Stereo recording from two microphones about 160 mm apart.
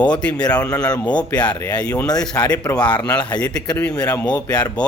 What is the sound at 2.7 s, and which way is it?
Speech, 5° left (ahead or behind).